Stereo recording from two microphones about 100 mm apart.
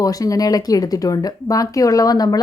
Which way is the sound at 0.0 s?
35° left (ahead or behind).